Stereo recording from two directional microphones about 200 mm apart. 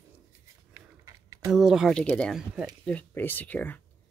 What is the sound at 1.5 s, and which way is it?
Speech, centre (ahead or behind).